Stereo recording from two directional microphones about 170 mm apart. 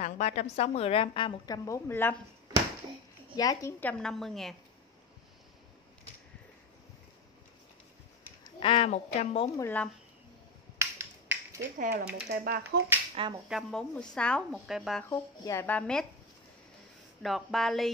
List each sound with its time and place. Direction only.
0.0 s a woman's voice: 40° left (ahead or behind); by 2.1 s 10° left (ahead or behind)
3.3 s a woman's voice: 20° left (ahead or behind)
3.8 s speech: 5° left (ahead or behind)
8.5 s a woman's voice: 30° left (ahead or behind)
9.6 s speech: 10° left (ahead or behind)
10.8 s finger snapping: 15° right (ahead or behind)
12.3 s speech: 65° right (ahead or behind)
13.1 s speech: 30° right (ahead or behind)
13.5 s speech: centre (ahead or behind)
15.0 s speech: 15° left (ahead or behind)
17.2 s speech: centre (ahead or behind)